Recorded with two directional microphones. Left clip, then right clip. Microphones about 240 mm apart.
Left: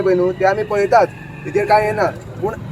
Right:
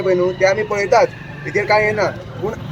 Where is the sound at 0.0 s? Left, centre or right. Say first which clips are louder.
Even; centre.